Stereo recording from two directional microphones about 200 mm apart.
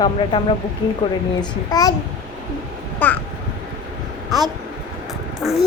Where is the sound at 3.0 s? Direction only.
10° left (ahead or behind).